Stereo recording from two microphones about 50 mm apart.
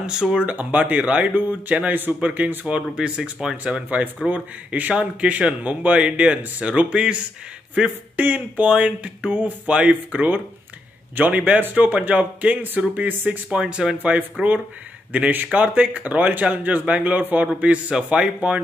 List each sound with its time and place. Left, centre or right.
0.0 s speech: centre
0.5 s speech: right
2.1 s speech: right
2.7 s speech: centre
4.3 s speech: right
13.6 s speech: centre
13.9 s speech: right
17.6 s speech: right